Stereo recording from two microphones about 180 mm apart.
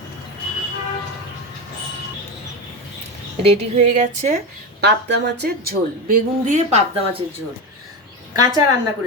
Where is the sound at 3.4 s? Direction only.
40° right (ahead or behind).